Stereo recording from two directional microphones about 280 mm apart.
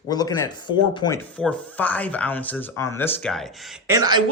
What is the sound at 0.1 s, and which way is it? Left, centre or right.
A man's voice, centre.